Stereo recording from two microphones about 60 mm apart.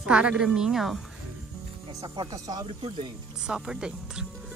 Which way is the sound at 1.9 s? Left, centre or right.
Right.